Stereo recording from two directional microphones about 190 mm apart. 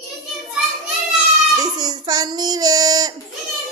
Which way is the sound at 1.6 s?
20° right (ahead or behind).